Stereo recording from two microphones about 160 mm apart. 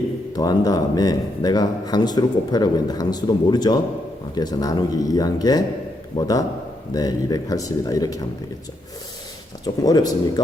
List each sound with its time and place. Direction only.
0.3 s speech: 25° left (ahead or behind)
9.8 s speech: 25° left (ahead or behind)